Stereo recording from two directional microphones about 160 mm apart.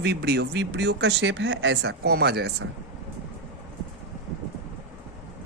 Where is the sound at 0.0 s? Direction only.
90° right.